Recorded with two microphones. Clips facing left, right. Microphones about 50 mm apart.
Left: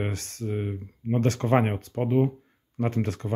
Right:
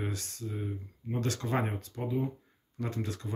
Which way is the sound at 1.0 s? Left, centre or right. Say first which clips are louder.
Left 9 dB; left.